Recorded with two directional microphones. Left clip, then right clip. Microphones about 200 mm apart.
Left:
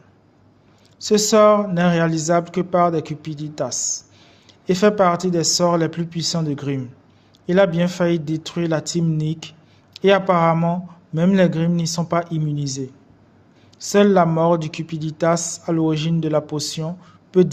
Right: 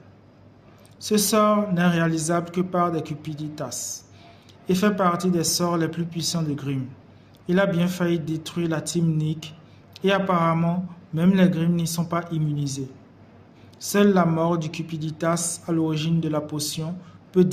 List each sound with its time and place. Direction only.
0.9 s speech: 35° left (ahead or behind)
13.8 s speech: 35° left (ahead or behind)